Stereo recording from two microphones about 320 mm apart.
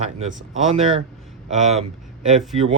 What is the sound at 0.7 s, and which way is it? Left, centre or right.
Speech, right.